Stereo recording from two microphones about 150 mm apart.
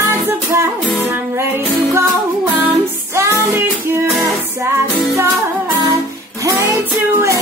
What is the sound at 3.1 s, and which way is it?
Music, 20° right (ahead or behind).